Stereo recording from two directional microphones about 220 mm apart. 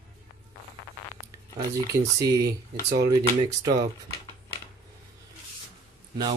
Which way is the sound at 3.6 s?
15° right (ahead or behind).